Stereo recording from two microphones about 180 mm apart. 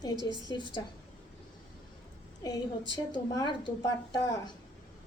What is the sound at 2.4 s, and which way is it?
A woman's voice, 20° left (ahead or behind).